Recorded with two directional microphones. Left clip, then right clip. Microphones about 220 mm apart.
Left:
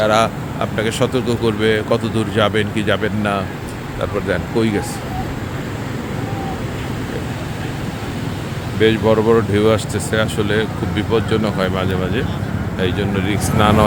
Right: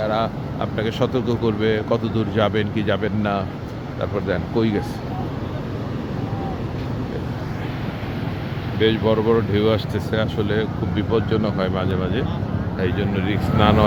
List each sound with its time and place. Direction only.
0.0 s speech: 25° left (ahead or behind)
0.6 s speech: 10° left (ahead or behind)
8.8 s speech: 15° left (ahead or behind)